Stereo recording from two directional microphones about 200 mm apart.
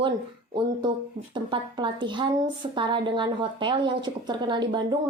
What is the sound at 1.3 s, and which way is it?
A woman's voice, 25° right (ahead or behind).